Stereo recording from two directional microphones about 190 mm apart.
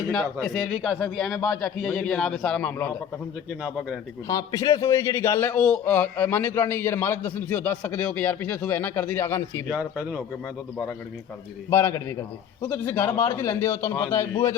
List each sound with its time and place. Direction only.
0.4 s a man's voice: centre (ahead or behind)
3.6 s a man's voice: centre (ahead or behind)
4.3 s a man's voice: 20° left (ahead or behind)
9.6 s speech: 10° right (ahead or behind)
11.7 s a man's voice: 15° left (ahead or behind)